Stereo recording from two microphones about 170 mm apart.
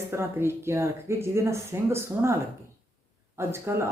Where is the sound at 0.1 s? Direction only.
15° right (ahead or behind).